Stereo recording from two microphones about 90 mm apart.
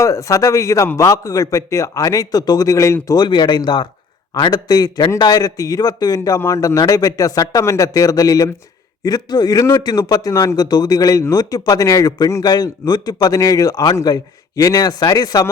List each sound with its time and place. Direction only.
0.0 s a man's voice: 35° left (ahead or behind)
3.2 s a man's voice: 55° left (ahead or behind)